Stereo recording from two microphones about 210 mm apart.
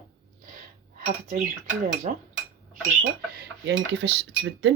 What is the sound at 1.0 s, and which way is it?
Speech, 40° right (ahead or behind).